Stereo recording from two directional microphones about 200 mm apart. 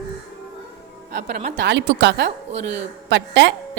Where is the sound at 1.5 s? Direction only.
60° right (ahead or behind).